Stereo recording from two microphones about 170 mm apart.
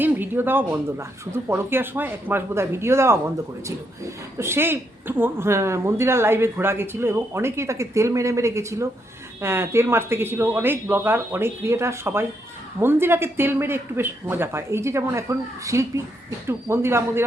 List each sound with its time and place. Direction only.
0.0 s speech: 10° right (ahead or behind)
4.4 s speech: 15° right (ahead or behind)